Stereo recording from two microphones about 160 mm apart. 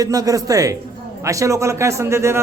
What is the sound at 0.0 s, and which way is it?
A man's voice, 20° right (ahead or behind).